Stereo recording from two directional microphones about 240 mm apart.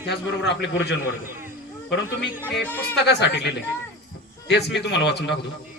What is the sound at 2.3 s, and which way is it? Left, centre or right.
Speech, centre.